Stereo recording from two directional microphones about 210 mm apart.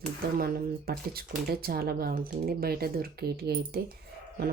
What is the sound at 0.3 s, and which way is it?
Speech, 45° right (ahead or behind).